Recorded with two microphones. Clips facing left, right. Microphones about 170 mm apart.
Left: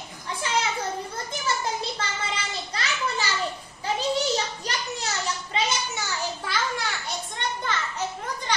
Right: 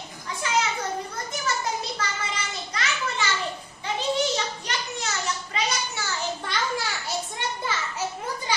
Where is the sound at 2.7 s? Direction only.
35° left (ahead or behind).